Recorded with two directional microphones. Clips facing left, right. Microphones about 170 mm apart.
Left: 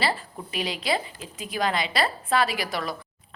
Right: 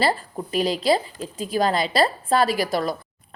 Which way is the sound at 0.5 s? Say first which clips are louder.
Right 7 dB; 40° right (ahead or behind).